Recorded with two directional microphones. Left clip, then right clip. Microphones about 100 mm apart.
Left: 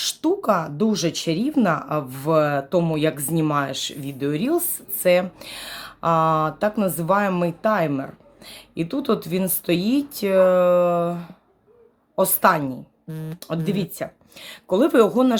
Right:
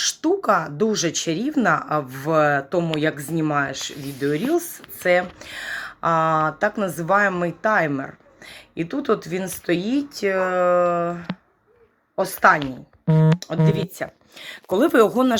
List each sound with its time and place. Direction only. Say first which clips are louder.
0.0 s speech: right 1 dB; 25° left (ahead or behind)
3.4 s a woman's voice: right 1 dB; 40° left (ahead or behind)
4.2 s a woman's voice: right 1 dB; 25° left (ahead or behind)
14.7 s speech: even; 20° left (ahead or behind)